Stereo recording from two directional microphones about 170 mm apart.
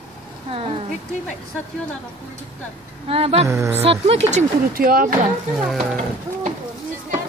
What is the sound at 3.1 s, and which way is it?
Speech, 35° right (ahead or behind).